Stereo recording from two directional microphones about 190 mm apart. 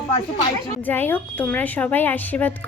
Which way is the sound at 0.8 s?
10° left (ahead or behind).